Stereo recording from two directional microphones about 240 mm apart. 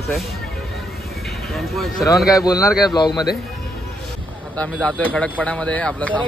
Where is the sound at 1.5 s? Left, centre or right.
Centre.